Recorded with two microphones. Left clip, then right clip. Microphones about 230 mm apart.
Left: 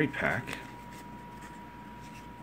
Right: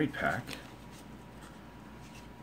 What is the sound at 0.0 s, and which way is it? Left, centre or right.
Speech, centre.